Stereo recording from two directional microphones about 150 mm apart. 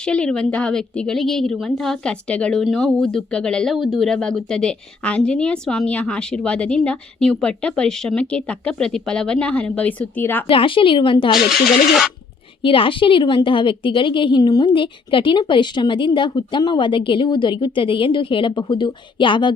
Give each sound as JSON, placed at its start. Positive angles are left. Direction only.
{"t": 0.0, "sound": "a woman's voice", "side_deg": 5}
{"t": 10.5, "sound": "a woman's voice", "side_deg": 35}
{"t": 11.3, "sound": "a woman's voice", "side_deg": 0}
{"t": 12.6, "sound": "a woman's voice", "side_deg": 35}